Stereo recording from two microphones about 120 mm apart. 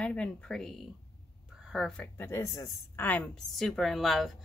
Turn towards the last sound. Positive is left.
turn(degrees=0)  # may be behind; listen again after turning